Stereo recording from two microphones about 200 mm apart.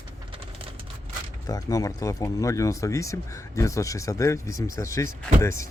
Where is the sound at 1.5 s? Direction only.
15° left (ahead or behind).